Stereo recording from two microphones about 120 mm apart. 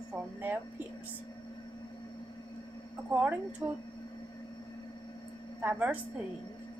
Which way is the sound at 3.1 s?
15° right (ahead or behind).